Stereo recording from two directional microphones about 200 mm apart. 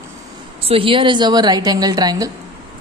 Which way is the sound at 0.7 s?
25° right (ahead or behind).